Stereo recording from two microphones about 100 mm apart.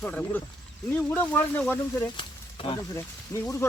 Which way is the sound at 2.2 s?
55° left (ahead or behind).